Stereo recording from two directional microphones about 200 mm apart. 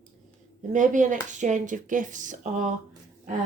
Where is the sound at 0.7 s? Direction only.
40° right (ahead or behind).